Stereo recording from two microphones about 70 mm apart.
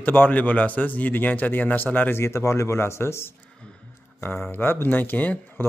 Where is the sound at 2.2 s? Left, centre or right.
Left.